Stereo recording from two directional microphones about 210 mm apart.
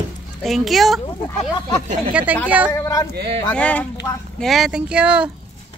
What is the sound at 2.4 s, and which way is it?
Speech, 5° right (ahead or behind).